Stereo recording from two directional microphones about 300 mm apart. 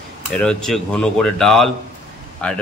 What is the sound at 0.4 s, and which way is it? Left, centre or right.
A man's voice, centre.